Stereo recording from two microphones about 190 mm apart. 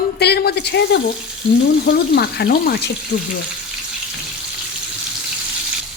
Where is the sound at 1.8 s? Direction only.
55° left (ahead or behind).